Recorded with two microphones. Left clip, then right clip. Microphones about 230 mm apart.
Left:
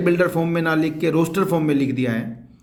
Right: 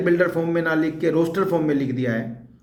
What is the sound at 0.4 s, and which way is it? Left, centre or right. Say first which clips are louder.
Speech: left 1 dB; left.